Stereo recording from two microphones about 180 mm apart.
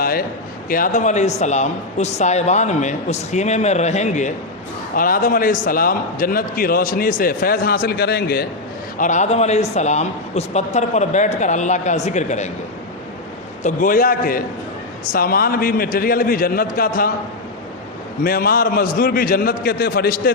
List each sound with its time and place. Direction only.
0.0 s a sound: 55° left (ahead or behind)
0.7 s speech: 45° left (ahead or behind)
4.9 s a man's voice: 50° left (ahead or behind)
9.0 s speech: 40° left (ahead or behind)
13.6 s a man's voice: 45° left (ahead or behind)
18.2 s a man's voice: 55° left (ahead or behind)